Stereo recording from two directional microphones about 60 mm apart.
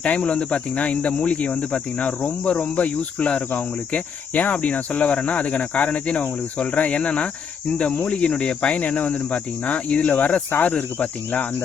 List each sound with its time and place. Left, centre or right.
0.0 s speech: left